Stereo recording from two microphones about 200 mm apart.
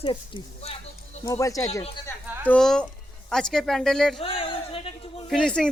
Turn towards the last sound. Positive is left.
turn(degrees=5)  # may be behind; listen again after turning